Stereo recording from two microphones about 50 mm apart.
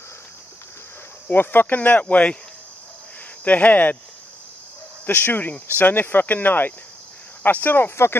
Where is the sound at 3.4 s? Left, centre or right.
Left.